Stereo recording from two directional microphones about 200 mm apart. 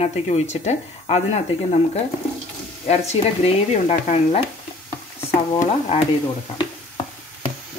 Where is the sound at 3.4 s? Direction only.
30° left (ahead or behind).